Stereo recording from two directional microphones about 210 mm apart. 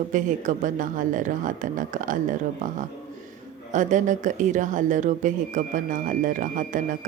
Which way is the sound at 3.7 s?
35° right (ahead or behind).